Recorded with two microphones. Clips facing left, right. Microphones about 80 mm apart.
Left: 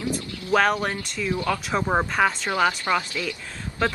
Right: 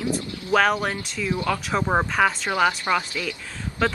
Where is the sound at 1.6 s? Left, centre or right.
Centre.